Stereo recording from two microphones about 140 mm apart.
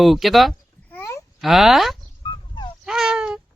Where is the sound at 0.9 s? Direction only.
15° left (ahead or behind).